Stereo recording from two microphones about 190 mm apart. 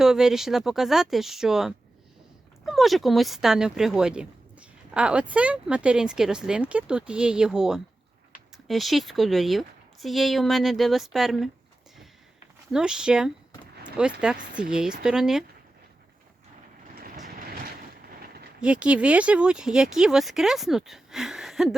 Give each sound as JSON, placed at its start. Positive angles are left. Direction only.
{"t": 0.0, "sound": "speech", "side_deg": -5}
{"t": 12.7, "sound": "speech", "side_deg": -5}
{"t": 17.2, "sound": "vehicle", "side_deg": -50}
{"t": 18.6, "sound": "speech", "side_deg": -5}